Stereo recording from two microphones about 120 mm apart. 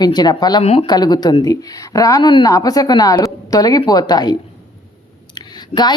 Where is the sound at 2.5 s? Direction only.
30° left (ahead or behind).